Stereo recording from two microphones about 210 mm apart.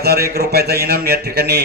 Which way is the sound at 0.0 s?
45° right (ahead or behind).